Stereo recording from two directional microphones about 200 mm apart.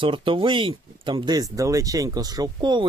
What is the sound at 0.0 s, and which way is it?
Speech, 25° right (ahead or behind).